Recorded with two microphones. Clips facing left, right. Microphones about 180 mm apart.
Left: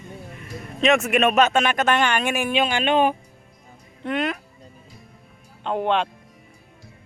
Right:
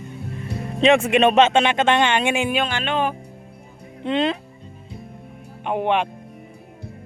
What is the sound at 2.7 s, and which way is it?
Speech, 15° left (ahead or behind).